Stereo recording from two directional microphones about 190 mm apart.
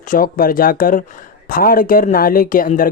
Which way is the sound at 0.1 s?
45° left (ahead or behind).